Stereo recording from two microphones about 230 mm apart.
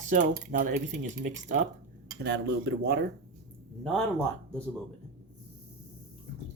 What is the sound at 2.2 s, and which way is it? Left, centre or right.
Speech, right.